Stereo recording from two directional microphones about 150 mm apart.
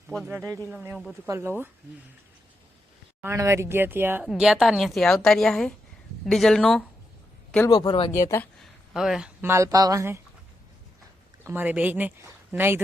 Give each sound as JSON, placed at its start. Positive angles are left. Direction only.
{"t": 0.3, "sound": "speech", "side_deg": -20}
{"t": 0.7, "sound": "speech", "side_deg": -5}
{"t": 3.2, "sound": "a woman's voice", "side_deg": -20}
{"t": 7.7, "sound": "speech", "side_deg": 30}
{"t": 8.1, "sound": "speech", "side_deg": 20}
{"t": 8.9, "sound": "speech", "side_deg": -5}
{"t": 9.4, "sound": "speech", "side_deg": -20}
{"t": 11.4, "sound": "speech", "side_deg": -10}